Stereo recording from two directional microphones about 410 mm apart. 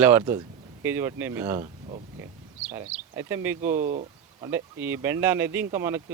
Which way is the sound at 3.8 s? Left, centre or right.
Centre.